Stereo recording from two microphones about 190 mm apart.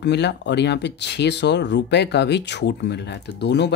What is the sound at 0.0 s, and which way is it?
Speech, 65° left (ahead or behind).